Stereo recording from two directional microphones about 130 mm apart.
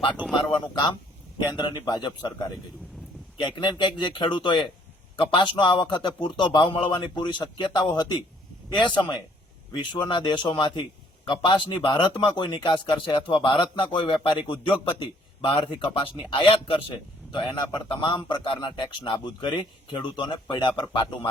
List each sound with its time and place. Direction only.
0.3 s speech: 40° left (ahead or behind)
3.6 s speech: 40° left (ahead or behind)